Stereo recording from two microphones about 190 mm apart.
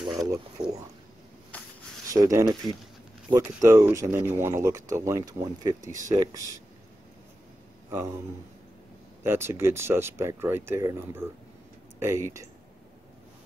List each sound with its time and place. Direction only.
0.0 s a sound: 20° right (ahead or behind)
0.6 s speech: 20° right (ahead or behind)
2.0 s speech: 15° right (ahead or behind)
9.2 s speech: 10° right (ahead or behind)